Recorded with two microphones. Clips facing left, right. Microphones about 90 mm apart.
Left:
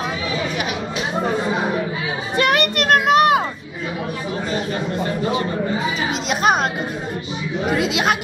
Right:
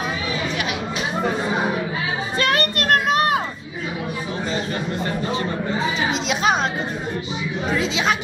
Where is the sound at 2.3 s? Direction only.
20° left (ahead or behind).